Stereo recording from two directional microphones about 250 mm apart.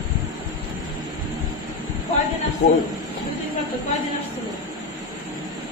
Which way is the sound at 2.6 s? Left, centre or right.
Left.